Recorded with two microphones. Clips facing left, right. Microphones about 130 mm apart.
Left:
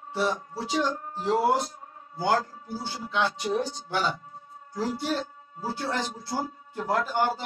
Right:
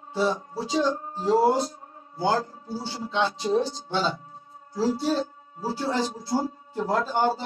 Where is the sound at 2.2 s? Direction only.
25° right (ahead or behind).